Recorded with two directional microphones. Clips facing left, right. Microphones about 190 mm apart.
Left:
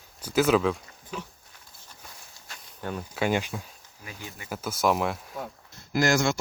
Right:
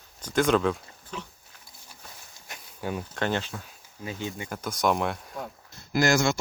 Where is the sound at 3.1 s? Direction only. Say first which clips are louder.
Left 5 dB; 10° left (ahead or behind).